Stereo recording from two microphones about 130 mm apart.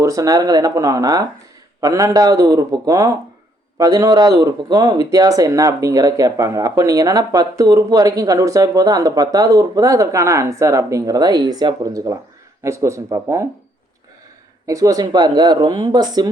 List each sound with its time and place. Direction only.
0.0 s speech: 25° right (ahead or behind)
14.7 s speech: 25° right (ahead or behind)